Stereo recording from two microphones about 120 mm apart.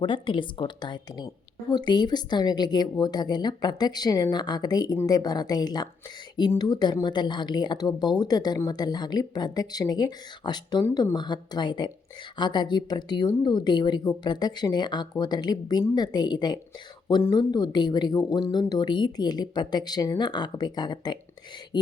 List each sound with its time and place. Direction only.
0.0 s speech: 45° left (ahead or behind)